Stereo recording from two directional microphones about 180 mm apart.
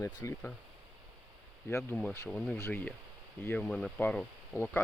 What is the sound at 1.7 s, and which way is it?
Speech, 10° left (ahead or behind).